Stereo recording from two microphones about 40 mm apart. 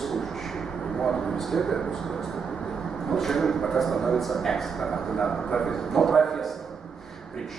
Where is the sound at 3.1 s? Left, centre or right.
Centre.